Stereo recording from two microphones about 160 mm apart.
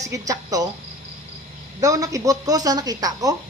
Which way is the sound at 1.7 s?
20° right (ahead or behind).